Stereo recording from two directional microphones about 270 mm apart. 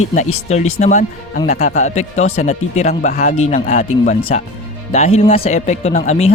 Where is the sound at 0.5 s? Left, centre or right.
Left.